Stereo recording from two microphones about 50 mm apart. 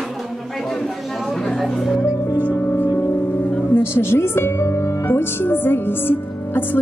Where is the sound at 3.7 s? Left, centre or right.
Left.